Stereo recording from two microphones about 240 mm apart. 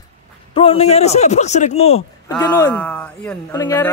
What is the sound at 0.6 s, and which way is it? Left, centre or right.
A man's voice, left.